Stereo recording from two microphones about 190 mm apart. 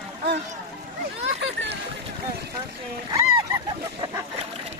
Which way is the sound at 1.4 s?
70° right (ahead or behind).